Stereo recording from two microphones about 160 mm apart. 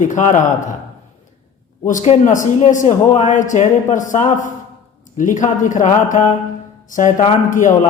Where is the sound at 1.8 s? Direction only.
50° left (ahead or behind).